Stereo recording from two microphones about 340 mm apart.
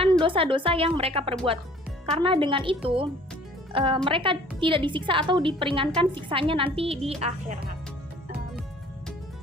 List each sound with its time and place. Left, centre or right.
0.0 s a woman's voice: centre